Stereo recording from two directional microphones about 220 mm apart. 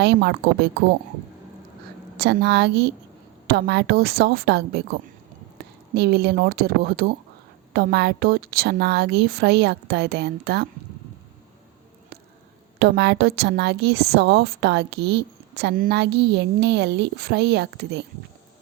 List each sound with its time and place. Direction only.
0.0 s a woman's voice: 50° right (ahead or behind)
2.1 s a woman's voice: 50° right (ahead or behind)
12.8 s a woman's voice: 45° right (ahead or behind)